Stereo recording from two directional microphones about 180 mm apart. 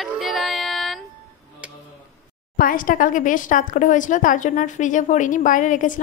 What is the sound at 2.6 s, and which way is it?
Speech, 50° left (ahead or behind).